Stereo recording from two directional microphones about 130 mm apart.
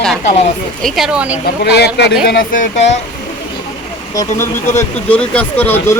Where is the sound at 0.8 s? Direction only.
Centre (ahead or behind).